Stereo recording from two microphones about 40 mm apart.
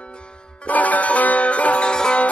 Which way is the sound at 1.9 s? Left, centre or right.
Left.